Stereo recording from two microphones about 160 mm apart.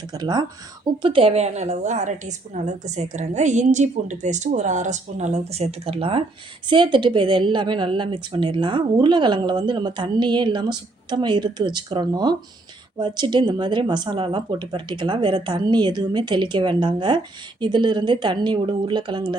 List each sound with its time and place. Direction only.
0.1 s a woman's voice: 25° right (ahead or behind)